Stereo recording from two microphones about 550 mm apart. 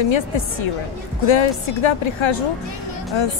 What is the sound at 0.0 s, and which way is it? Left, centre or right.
A woman's voice, left.